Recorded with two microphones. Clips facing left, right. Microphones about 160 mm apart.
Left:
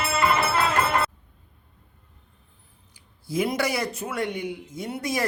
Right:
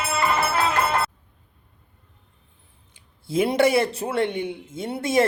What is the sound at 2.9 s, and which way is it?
Speech, 25° right (ahead or behind).